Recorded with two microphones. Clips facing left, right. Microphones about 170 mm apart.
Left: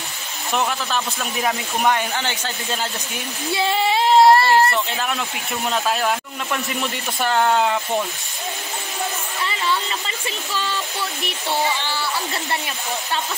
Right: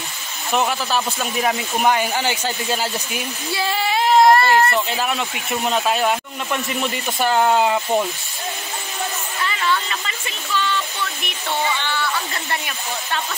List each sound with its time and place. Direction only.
0.5 s speech: 5° right (ahead or behind)
3.5 s speech: 25° left (ahead or behind)
4.7 s speech: 5° right (ahead or behind)
9.5 s speech: 30° left (ahead or behind)